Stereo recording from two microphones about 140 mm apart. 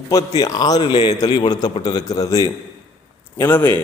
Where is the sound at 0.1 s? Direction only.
25° left (ahead or behind).